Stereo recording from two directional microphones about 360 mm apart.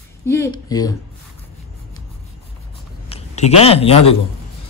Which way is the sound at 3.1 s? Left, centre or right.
Centre.